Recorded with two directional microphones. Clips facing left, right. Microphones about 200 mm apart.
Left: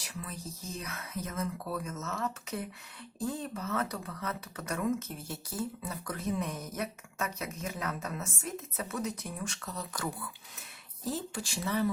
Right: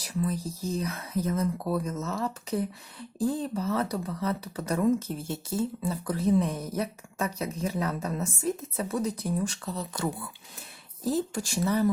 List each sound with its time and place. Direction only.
0.0 s speech: 35° right (ahead or behind)
11.0 s speech: 40° right (ahead or behind)